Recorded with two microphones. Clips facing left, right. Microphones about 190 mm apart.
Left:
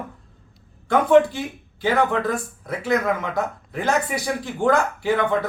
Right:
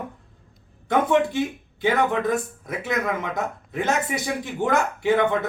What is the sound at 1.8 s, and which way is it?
Speech, 20° right (ahead or behind).